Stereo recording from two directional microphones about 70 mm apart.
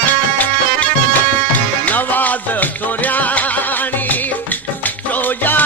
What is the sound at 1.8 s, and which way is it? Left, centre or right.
Music, left.